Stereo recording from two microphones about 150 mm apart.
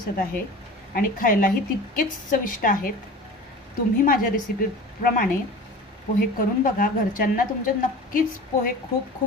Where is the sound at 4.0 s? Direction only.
70° left (ahead or behind).